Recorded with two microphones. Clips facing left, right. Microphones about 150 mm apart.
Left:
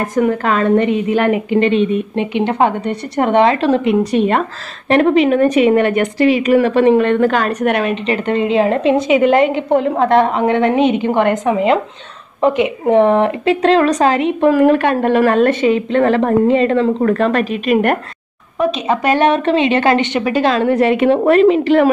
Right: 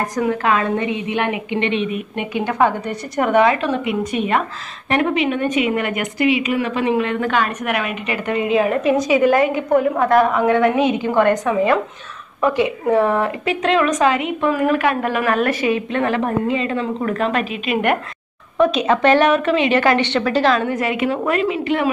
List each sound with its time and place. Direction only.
0.1 s a woman's voice: 45° left (ahead or behind)
18.6 s speech: centre (ahead or behind)
19.1 s a woman's voice: 30° left (ahead or behind)
21.1 s a woman's voice: 35° left (ahead or behind)